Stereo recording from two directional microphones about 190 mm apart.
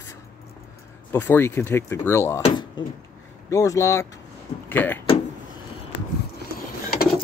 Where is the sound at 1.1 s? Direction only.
10° left (ahead or behind).